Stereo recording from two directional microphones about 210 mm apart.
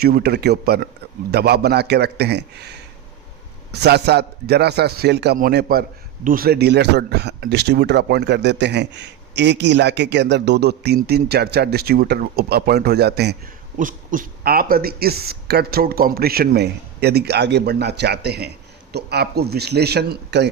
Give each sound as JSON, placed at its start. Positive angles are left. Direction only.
{"t": 0.0, "sound": "speech", "side_deg": -50}
{"t": 13.7, "sound": "speech", "side_deg": -40}